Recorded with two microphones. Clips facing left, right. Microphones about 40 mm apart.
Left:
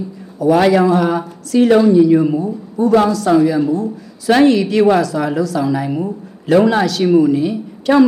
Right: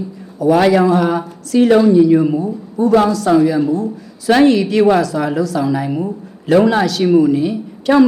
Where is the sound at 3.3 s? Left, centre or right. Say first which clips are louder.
Even; centre.